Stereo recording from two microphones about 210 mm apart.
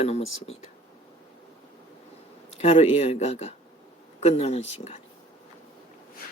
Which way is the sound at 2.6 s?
30° left (ahead or behind).